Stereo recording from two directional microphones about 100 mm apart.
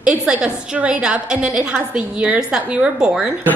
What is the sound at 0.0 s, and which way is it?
A woman's voice, 10° right (ahead or behind).